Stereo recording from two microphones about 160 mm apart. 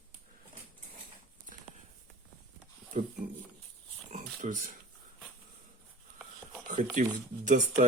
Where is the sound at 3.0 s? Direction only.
50° right (ahead or behind).